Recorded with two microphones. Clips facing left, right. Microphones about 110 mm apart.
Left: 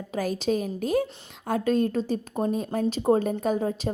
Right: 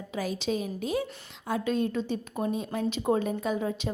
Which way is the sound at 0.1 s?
45° left (ahead or behind).